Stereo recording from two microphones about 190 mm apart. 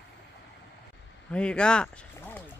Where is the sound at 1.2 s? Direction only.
5° left (ahead or behind).